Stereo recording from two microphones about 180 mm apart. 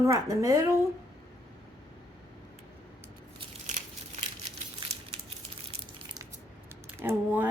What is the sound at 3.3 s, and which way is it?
Crumpling, 40° right (ahead or behind).